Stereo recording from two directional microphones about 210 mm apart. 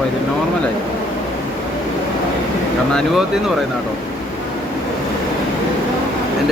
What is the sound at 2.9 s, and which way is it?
Speech, centre (ahead or behind).